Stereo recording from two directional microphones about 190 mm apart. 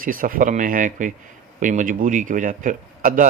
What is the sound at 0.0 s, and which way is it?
Speech, 45° right (ahead or behind).